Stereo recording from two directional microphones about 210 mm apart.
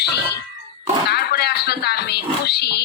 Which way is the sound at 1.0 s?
50° left (ahead or behind).